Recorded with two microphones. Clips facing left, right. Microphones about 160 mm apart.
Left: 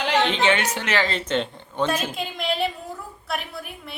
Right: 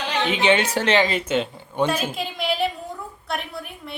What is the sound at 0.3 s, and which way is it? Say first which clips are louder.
Speech: right 2 dB; 20° right (ahead or behind).